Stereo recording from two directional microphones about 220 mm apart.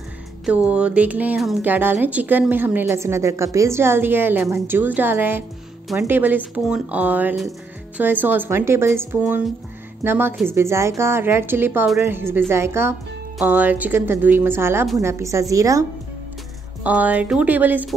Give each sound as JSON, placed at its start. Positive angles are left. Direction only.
{"t": 0.7, "sound": "speech", "side_deg": -5}
{"t": 16.8, "sound": "speech", "side_deg": -5}